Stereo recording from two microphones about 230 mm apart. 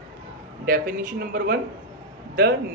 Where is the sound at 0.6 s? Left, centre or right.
Right.